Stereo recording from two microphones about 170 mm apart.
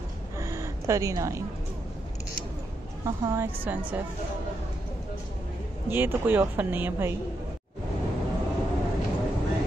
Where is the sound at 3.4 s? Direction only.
10° right (ahead or behind).